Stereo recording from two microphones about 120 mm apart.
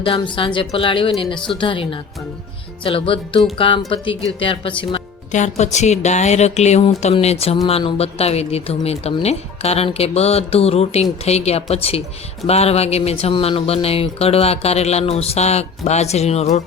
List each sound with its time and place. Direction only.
0.0 s speech: 45° left (ahead or behind)
5.3 s speech: 80° left